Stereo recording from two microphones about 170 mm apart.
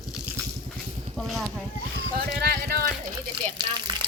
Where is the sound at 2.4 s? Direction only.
70° right (ahead or behind).